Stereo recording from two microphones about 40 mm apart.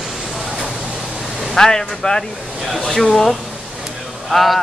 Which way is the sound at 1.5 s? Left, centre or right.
Centre.